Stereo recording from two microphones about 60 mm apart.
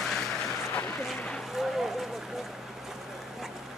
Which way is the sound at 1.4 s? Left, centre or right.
Centre.